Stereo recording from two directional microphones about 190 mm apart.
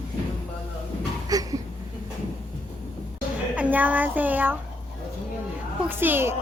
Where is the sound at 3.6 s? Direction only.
10° right (ahead or behind).